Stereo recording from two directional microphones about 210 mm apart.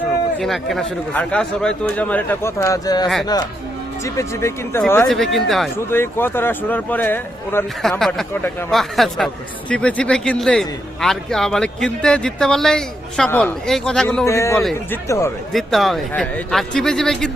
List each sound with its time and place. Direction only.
0.3 s speech: centre (ahead or behind)
5.7 s speech: 10° left (ahead or behind)
14.3 s speech: 15° left (ahead or behind)
14.6 s speech: centre (ahead or behind)
15.0 s speech: 15° left (ahead or behind)
15.5 s speech: centre (ahead or behind)